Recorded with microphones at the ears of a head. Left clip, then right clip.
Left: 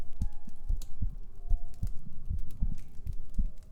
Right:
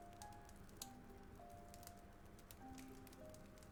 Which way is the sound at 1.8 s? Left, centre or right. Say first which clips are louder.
Left 5 dB; left.